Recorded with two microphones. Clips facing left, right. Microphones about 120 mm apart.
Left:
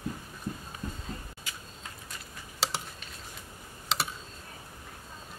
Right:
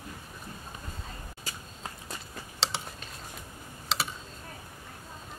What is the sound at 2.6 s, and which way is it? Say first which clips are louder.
Typing: even; 5° left (ahead or behind).